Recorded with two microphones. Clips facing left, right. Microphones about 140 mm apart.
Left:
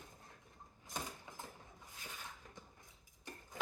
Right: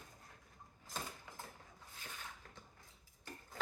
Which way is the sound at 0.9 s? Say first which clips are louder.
Left 1 dB; 15° left (ahead or behind).